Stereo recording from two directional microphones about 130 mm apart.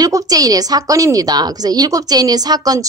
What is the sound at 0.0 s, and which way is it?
A woman's voice, 25° right (ahead or behind).